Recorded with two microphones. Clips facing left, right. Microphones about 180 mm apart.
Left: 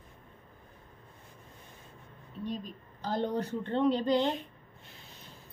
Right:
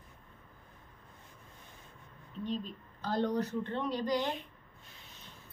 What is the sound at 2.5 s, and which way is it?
A woman's voice, 15° left (ahead or behind).